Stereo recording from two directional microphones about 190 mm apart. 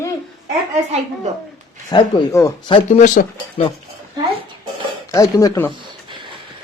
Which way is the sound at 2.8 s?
40° left (ahead or behind).